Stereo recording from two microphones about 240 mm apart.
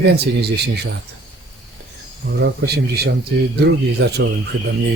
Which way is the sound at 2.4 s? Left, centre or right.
Right.